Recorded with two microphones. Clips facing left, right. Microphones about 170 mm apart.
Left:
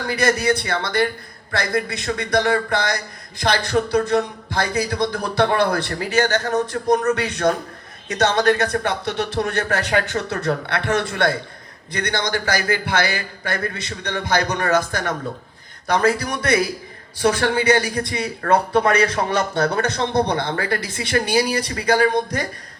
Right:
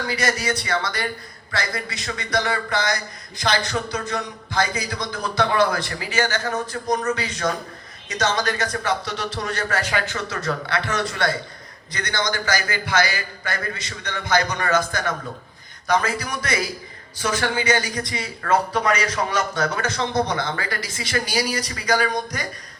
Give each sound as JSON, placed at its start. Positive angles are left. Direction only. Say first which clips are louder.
{"t": 0.1, "sound": "a man's voice", "louder": "left 7 dB", "side_deg": 60}